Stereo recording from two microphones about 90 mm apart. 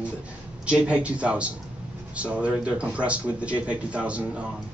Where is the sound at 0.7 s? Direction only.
15° right (ahead or behind).